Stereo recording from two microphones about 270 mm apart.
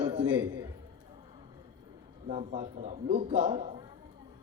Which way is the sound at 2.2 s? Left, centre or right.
Right.